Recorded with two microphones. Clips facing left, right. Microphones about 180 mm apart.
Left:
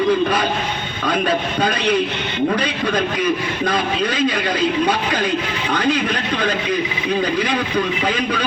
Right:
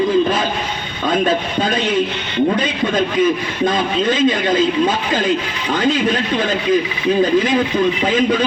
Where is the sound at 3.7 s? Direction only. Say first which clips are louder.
Right 3 dB; 25° right (ahead or behind).